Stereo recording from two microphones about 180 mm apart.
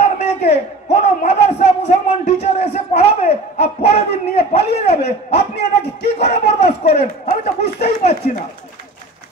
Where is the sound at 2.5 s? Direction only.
35° left (ahead or behind).